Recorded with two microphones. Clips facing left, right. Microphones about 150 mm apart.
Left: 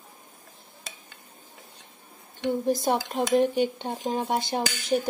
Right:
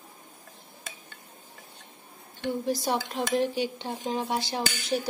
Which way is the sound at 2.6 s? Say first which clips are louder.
Left 3 dB; 50° left (ahead or behind).